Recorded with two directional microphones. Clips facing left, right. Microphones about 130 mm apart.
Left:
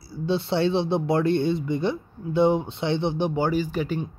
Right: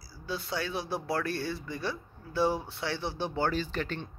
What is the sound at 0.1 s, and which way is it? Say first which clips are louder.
Speech: left 11 dB; 25° left (ahead or behind).